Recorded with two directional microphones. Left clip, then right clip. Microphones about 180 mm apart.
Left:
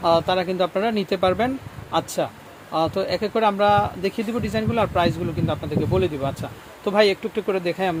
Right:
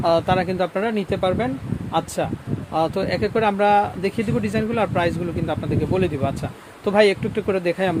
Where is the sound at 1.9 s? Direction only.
5° right (ahead or behind).